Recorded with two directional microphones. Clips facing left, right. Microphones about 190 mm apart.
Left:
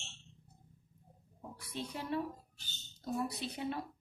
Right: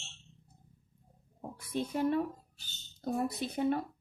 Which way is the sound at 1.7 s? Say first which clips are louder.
Right 8 dB; 50° right (ahead or behind).